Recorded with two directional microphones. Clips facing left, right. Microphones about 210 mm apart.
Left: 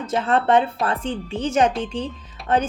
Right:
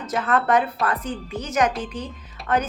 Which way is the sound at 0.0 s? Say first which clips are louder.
Left 2 dB; 30° left (ahead or behind).